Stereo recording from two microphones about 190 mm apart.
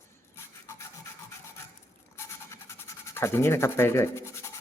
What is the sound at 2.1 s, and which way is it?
Toothbrush, 15° left (ahead or behind).